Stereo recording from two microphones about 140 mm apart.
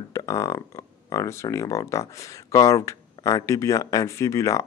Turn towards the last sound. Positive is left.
turn(degrees=20)  # may be behind; listen again after turning